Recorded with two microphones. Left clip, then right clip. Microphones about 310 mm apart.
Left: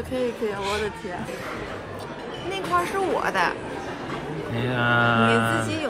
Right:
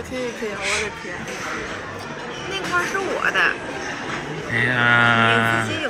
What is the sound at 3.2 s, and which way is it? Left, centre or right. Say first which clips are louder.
Speech: right 7 dB; left.